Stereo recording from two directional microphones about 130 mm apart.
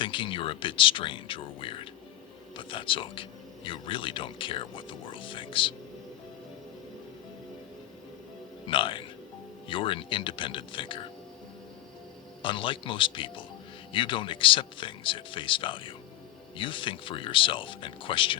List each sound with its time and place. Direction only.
0.0 s speech: 40° left (ahead or behind)
8.6 s music: 40° left (ahead or behind)
9.6 s speech: 40° left (ahead or behind)
12.4 s speech: 40° left (ahead or behind)